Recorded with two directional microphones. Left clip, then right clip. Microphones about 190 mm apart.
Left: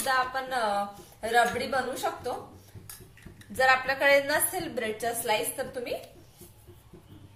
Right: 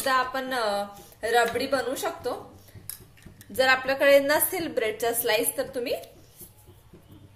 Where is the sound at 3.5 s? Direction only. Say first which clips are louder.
Right 1 dB; 55° right (ahead or behind).